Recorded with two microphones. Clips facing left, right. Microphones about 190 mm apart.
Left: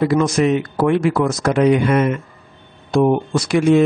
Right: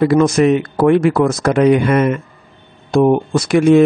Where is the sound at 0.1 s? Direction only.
55° right (ahead or behind).